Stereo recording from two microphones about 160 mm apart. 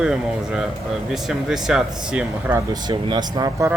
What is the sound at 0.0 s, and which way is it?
Speech, 5° right (ahead or behind).